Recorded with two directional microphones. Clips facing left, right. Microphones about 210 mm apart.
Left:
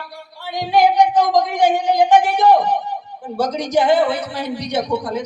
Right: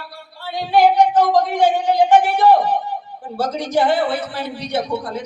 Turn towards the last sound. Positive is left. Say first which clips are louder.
# left 2 dB
turn(degrees=15)  # may be behind; listen again after turning